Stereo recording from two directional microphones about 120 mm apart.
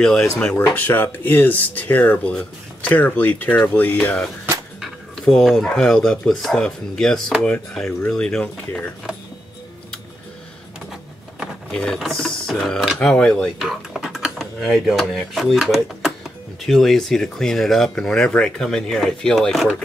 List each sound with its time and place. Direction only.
0.0 s speech: 5° left (ahead or behind)
4.8 s speech: centre (ahead or behind)
11.7 s speech: 5° left (ahead or behind)